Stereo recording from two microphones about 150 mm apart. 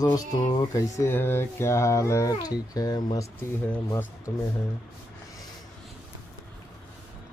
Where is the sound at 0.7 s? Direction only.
20° left (ahead or behind).